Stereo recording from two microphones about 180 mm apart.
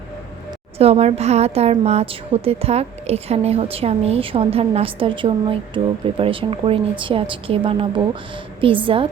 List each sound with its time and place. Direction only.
0.8 s a woman's voice: 35° right (ahead or behind)